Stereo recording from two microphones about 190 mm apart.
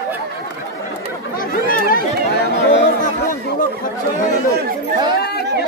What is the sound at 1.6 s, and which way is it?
Chatter, 50° left (ahead or behind).